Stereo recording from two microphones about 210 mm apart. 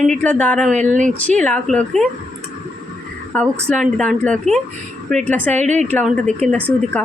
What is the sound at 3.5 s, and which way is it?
Speech, 5° left (ahead or behind).